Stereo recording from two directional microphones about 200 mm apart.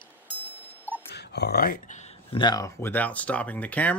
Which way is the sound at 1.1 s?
55° left (ahead or behind).